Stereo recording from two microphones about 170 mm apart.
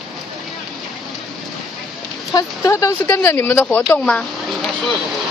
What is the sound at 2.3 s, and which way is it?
Speech, 20° left (ahead or behind).